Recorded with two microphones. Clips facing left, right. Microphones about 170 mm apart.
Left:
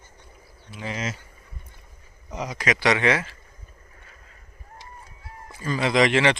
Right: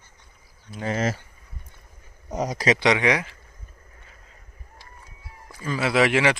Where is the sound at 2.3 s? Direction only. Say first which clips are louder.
Right 4 dB; 40° right (ahead or behind).